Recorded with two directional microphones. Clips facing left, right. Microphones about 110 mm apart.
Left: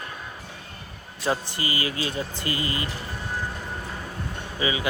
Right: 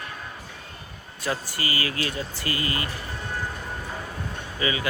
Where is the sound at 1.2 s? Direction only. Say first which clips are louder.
Left 2 dB; 25° left (ahead or behind).